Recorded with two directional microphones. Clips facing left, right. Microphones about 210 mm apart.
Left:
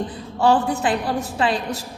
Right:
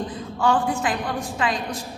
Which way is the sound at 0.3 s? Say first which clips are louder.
Left 3 dB; 35° left (ahead or behind).